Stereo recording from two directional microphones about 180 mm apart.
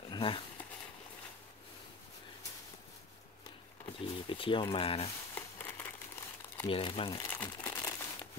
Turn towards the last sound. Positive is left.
turn(degrees=20)  # may be behind; listen again after turning